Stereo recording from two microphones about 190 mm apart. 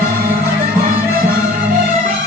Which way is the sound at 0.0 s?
50° right (ahead or behind).